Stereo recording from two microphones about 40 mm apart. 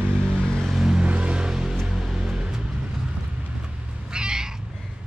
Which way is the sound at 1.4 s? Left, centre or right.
Centre.